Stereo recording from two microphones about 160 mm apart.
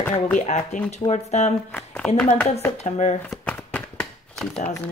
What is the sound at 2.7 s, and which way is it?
Speech, 45° left (ahead or behind).